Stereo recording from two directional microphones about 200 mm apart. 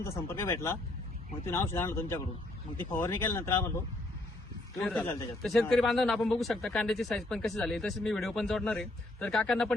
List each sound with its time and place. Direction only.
0.0 s speech: 15° left (ahead or behind)
4.8 s speech: centre (ahead or behind)